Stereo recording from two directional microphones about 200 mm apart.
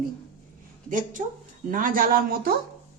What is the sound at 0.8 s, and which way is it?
Speech, 40° right (ahead or behind).